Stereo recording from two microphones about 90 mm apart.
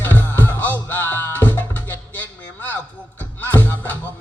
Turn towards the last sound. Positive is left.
turn(degrees=20)  # may be behind; listen again after turning